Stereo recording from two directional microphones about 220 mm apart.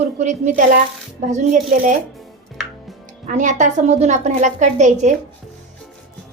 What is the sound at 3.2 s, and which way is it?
A woman's voice, 35° right (ahead or behind).